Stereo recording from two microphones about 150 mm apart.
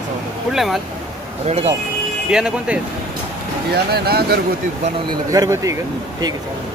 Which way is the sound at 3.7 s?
90° right.